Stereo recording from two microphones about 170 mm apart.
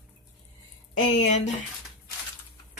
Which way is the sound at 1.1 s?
45° left (ahead or behind).